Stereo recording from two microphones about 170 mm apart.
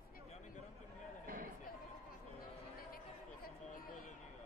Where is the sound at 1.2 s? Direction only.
55° right (ahead or behind).